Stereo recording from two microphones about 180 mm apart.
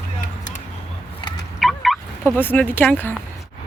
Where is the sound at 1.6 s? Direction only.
Centre (ahead or behind).